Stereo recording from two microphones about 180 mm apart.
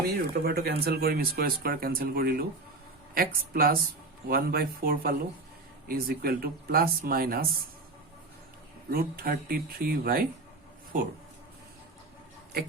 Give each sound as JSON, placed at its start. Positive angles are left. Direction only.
{"t": 0.3, "sound": "speech", "side_deg": -60}
{"t": 8.9, "sound": "speech", "side_deg": -55}